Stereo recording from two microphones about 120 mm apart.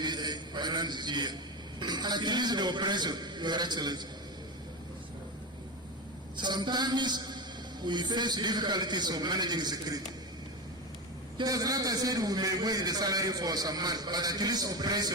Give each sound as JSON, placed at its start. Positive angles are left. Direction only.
{"t": 0.0, "sound": "a sound", "side_deg": -35}
{"t": 1.8, "sound": "a man's voice", "side_deg": -35}
{"t": 6.3, "sound": "a man's voice", "side_deg": -40}
{"t": 11.3, "sound": "a man's voice", "side_deg": -30}